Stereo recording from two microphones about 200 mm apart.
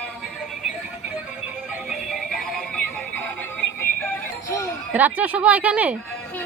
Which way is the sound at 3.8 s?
15° left (ahead or behind).